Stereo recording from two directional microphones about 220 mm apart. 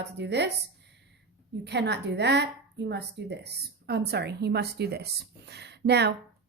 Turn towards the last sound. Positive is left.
turn(degrees=-50)  # may be behind; listen again after turning